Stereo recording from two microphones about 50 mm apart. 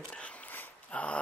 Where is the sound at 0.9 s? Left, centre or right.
Left.